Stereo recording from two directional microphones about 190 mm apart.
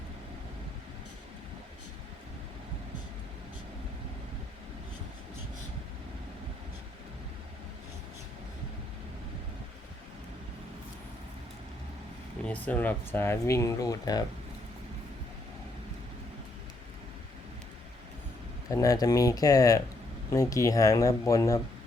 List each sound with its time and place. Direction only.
12.5 s speech: 10° left (ahead or behind)
18.7 s speech: 20° left (ahead or behind)